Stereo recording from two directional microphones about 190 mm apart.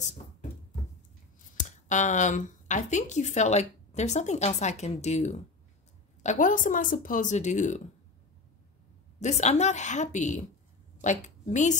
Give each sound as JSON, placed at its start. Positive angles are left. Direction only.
{"t": 0.0, "sound": "a sound", "side_deg": 40}
{"t": 1.6, "sound": "speech", "side_deg": 40}
{"t": 9.2, "sound": "a woman's voice", "side_deg": 35}